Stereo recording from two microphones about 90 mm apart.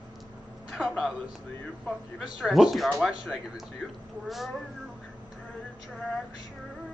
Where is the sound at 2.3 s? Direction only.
5° right (ahead or behind).